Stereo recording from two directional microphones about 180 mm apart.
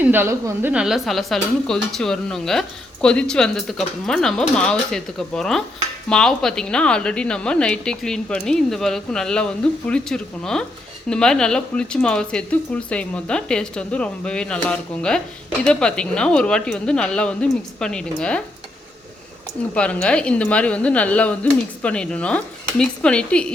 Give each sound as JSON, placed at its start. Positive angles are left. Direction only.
{"t": 0.0, "sound": "speech", "side_deg": -10}
{"t": 19.7, "sound": "speech", "side_deg": 5}